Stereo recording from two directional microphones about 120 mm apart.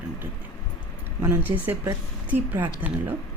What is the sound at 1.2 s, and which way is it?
Speech, 15° right (ahead or behind).